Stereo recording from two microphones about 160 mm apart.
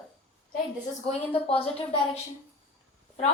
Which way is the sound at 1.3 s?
35° left (ahead or behind).